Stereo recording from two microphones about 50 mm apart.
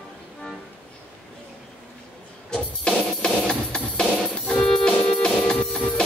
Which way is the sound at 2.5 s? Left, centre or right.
Centre.